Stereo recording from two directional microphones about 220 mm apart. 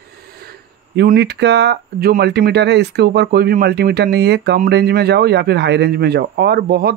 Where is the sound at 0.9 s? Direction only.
45° right (ahead or behind).